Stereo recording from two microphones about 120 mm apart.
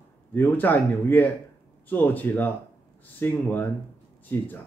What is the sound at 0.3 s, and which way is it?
Speech, 15° left (ahead or behind).